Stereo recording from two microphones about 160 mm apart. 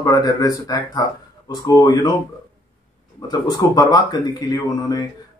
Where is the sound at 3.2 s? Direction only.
25° left (ahead or behind).